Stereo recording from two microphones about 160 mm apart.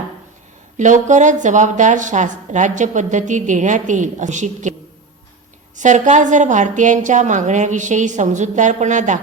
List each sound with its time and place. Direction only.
0.8 s a woman's voice: 50° right (ahead or behind)
5.7 s a woman's voice: 50° right (ahead or behind)